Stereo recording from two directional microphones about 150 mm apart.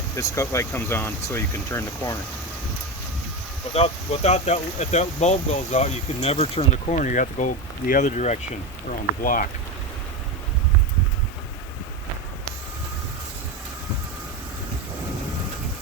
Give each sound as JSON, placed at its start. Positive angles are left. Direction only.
{"t": 0.2, "sound": "speech", "side_deg": 20}
{"t": 3.8, "sound": "speech", "side_deg": 45}
{"t": 8.9, "sound": "speech", "side_deg": 65}